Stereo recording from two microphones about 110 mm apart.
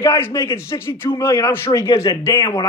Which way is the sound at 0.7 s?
25° left (ahead or behind).